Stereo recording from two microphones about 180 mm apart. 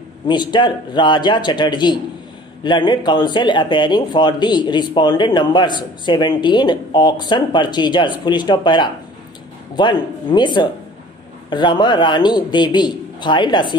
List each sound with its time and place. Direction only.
0.3 s speech: 25° left (ahead or behind)